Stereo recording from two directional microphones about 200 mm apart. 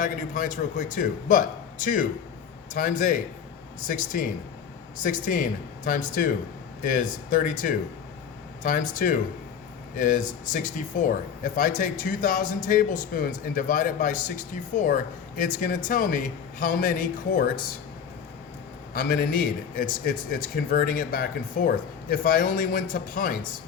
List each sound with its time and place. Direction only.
0.0 s a man's voice: 40° left (ahead or behind)
15.4 s speech: 40° left (ahead or behind)
18.9 s speech: 45° left (ahead or behind)